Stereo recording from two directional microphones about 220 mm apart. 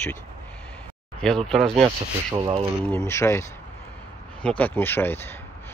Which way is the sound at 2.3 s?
20° right (ahead or behind).